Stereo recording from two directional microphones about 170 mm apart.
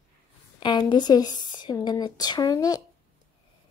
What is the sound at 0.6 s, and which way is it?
A woman's voice, 25° left (ahead or behind).